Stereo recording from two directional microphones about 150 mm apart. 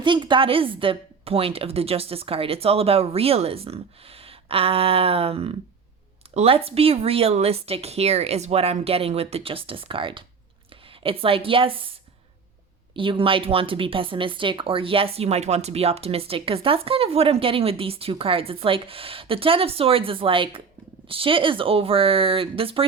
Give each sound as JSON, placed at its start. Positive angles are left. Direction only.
{"t": 0.0, "sound": "speech", "side_deg": -30}
{"t": 13.0, "sound": "speech", "side_deg": -35}